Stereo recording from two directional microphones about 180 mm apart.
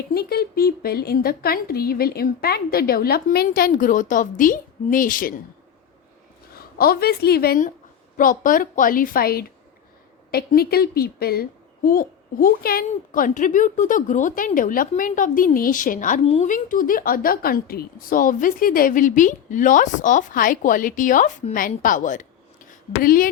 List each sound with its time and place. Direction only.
0.1 s speech: 55° left (ahead or behind)
6.6 s speech: 55° left (ahead or behind); by 16.5 s 35° left (ahead or behind)
16.5 s a woman's voice: 50° left (ahead or behind)